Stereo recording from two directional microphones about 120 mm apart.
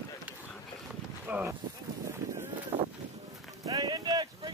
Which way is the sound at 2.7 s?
45° right (ahead or behind).